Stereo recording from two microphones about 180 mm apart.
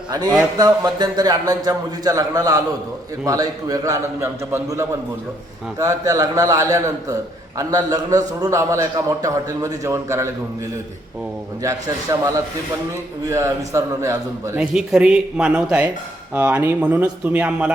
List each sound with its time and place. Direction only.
0.1 s a man's voice: 20° right (ahead or behind)
12.1 s speech: 20° right (ahead or behind)
13.3 s speech: 15° right (ahead or behind)
14.6 s speech: 5° right (ahead or behind)